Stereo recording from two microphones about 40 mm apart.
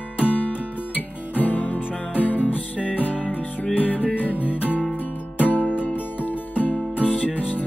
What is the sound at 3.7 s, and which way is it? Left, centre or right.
Music, left.